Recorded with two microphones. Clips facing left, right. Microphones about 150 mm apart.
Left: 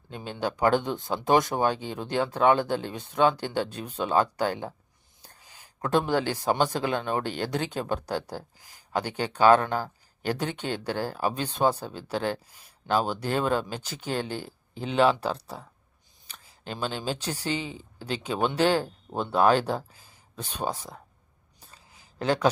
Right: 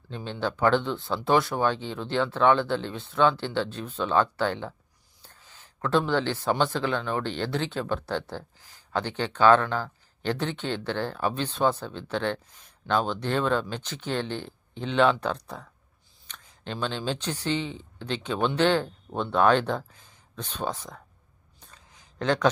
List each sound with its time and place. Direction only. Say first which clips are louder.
0.1 s speech: even; 15° left (ahead or behind)
5.4 s a sound: right 1 dB; 10° left (ahead or behind)
6.4 s speech: even; 15° left (ahead or behind)
9.6 s speech: left 1 dB; 40° left (ahead or behind)
10.2 s speech: right 1 dB; 10° left (ahead or behind)
15.4 s speech: even; 30° left (ahead or behind)
16.2 s speech: right 1 dB; 10° left (ahead or behind)
20.0 s a sound: right 1 dB; 10° left (ahead or behind)